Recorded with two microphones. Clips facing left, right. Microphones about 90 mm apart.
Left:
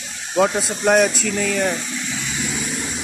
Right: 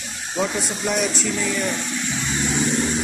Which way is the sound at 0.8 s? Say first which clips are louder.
Left 9 dB; 60° left (ahead or behind).